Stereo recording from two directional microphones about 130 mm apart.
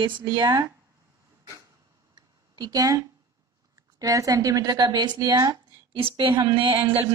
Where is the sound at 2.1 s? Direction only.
30° right (ahead or behind).